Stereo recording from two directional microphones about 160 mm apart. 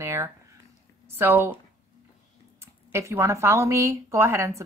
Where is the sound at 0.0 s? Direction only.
15° right (ahead or behind).